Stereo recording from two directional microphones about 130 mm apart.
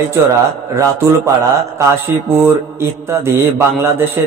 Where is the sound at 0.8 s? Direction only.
25° right (ahead or behind).